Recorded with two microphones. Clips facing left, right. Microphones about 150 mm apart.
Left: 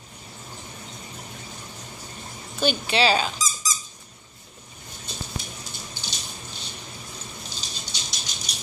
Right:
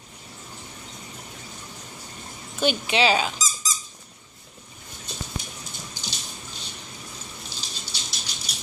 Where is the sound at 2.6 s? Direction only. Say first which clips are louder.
Even; 15° right (ahead or behind).